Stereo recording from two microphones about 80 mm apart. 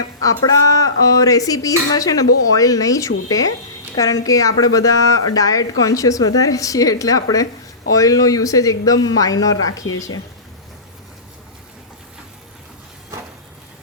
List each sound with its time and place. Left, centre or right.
0.2 s speech: left